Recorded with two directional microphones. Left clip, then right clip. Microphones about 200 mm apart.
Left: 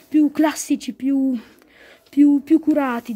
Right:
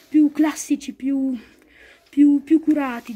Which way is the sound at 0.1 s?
55° left (ahead or behind).